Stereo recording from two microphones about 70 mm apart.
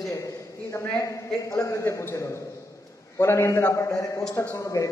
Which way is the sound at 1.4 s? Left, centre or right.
Left.